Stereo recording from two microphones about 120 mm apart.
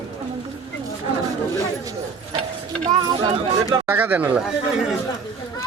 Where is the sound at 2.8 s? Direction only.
35° right (ahead or behind).